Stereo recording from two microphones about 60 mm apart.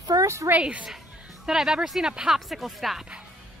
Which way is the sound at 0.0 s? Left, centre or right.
Right.